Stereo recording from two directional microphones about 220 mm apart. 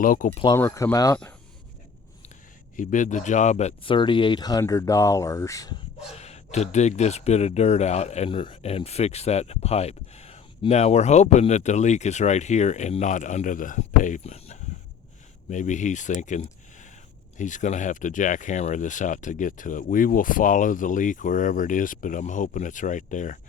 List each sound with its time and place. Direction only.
0.0 s speech: 40° left (ahead or behind)
0.3 s speech: 25° left (ahead or behind)
0.5 s speech: 15° left (ahead or behind)
2.7 s speech: 35° left (ahead or behind); by 5.7 s 15° left (ahead or behind)
6.1 s speech: 30° left (ahead or behind)